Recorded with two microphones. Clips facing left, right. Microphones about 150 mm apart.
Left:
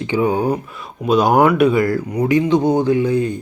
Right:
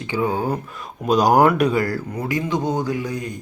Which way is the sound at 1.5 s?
35° right (ahead or behind).